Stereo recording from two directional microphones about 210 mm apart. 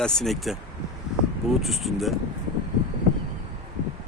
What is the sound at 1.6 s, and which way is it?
Speech, centre (ahead or behind).